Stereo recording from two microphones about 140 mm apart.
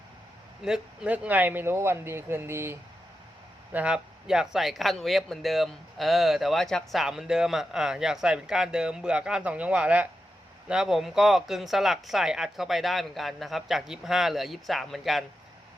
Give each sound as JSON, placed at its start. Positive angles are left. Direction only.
{"t": 0.6, "sound": "speech", "side_deg": -5}